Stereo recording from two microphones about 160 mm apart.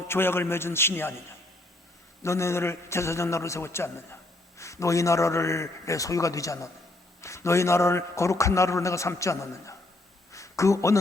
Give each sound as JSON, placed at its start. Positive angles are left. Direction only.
{"t": 0.1, "sound": "a man's voice", "side_deg": 15}
{"t": 2.2, "sound": "a man's voice", "side_deg": 15}
{"t": 10.3, "sound": "a sound", "side_deg": 20}